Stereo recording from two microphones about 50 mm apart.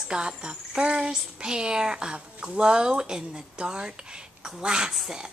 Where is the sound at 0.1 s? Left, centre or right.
Centre.